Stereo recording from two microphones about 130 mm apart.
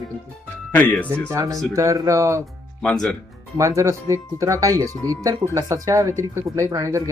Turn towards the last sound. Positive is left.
turn(degrees=-25)  # may be behind; listen again after turning